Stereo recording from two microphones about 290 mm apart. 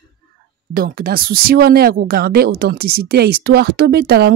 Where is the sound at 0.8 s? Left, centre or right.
Right.